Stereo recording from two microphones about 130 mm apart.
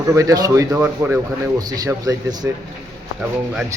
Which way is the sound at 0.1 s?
25° right (ahead or behind).